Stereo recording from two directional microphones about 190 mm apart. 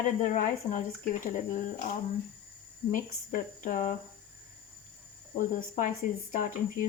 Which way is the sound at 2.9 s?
45° left (ahead or behind).